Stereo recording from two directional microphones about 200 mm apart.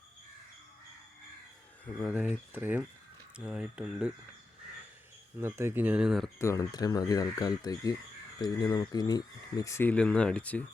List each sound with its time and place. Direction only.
2.0 s speech: 5° right (ahead or behind)
5.4 s speech: 10° right (ahead or behind)
6.4 s speech: 15° left (ahead or behind)